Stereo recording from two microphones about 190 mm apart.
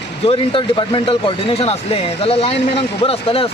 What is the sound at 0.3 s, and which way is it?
Speech, 25° left (ahead or behind).